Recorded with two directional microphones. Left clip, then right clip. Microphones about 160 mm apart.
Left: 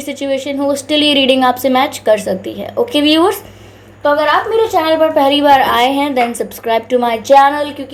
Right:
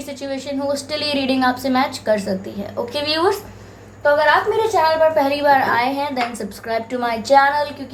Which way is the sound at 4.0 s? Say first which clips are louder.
Left 3 dB; 45° left (ahead or behind).